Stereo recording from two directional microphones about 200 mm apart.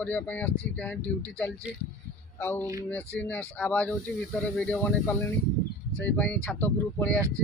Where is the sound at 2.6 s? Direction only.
15° right (ahead or behind).